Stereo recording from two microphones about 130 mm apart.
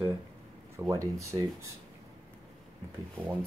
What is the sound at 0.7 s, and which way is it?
Speech, 25° right (ahead or behind).